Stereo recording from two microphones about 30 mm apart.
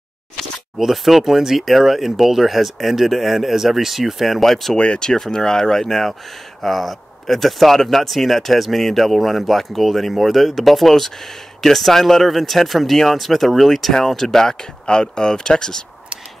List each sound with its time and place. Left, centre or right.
0.4 s speech: centre
4.7 s speech: left
6.6 s speech: centre
12.9 s speech: centre
13.2 s speech: centre; by 15.8 s left